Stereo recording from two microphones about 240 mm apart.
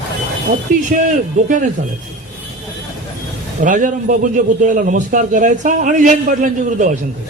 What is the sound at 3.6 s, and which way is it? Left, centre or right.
A man's voice, right.